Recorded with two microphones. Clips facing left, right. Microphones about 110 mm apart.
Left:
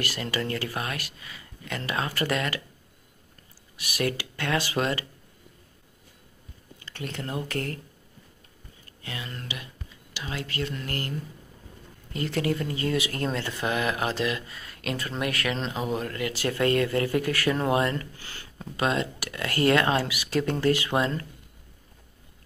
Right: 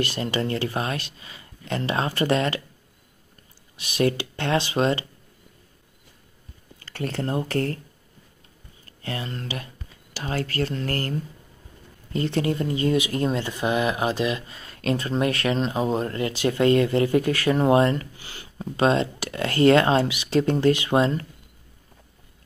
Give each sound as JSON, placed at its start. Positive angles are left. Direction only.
{"t": 0.0, "sound": "speech", "side_deg": -25}
{"t": 3.7, "sound": "speech", "side_deg": -25}
{"t": 6.8, "sound": "speech", "side_deg": -40}
{"t": 8.8, "sound": "speech", "side_deg": -40}
{"t": 12.1, "sound": "speech", "side_deg": -30}
{"t": 18.8, "sound": "speech", "side_deg": -30}